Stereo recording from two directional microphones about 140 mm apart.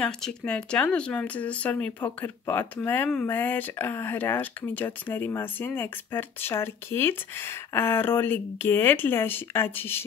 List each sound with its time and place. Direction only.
0.0 s speech: 5° left (ahead or behind)